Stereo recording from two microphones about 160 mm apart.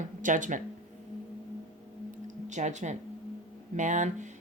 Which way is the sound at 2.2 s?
50° right (ahead or behind).